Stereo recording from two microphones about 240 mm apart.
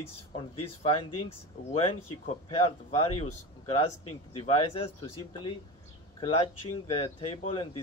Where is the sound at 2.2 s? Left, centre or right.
Left.